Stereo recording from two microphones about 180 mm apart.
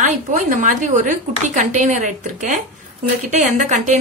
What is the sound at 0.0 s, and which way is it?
A woman's voice, 45° right (ahead or behind).